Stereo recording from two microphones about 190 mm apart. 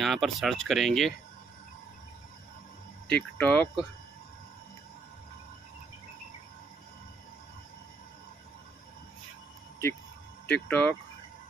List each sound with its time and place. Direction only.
0.0 s speech: centre (ahead or behind)
3.1 s speech: 5° left (ahead or behind)
10.5 s speech: 10° left (ahead or behind)